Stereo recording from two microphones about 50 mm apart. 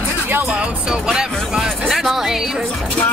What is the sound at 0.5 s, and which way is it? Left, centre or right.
Speech, centre.